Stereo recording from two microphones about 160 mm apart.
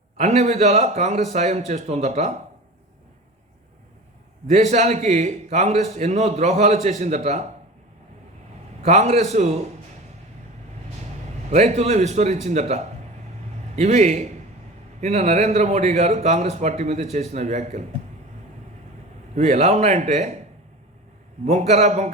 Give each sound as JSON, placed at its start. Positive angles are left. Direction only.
{"t": 0.2, "sound": "a man's voice", "side_deg": -45}
{"t": 4.4, "sound": "a man's voice", "side_deg": -45}
{"t": 8.8, "sound": "a man's voice", "side_deg": -45}
{"t": 11.5, "sound": "a man's voice", "side_deg": -45}
{"t": 19.3, "sound": "a man's voice", "side_deg": -45}
{"t": 21.4, "sound": "a man's voice", "side_deg": -45}